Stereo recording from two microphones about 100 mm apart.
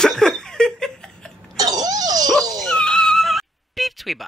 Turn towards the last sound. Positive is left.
turn(degrees=0)  # may be behind; listen again after turning